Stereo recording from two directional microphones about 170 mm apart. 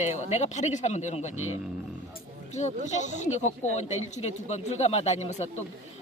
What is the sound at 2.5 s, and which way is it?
Speech, 45° left (ahead or behind).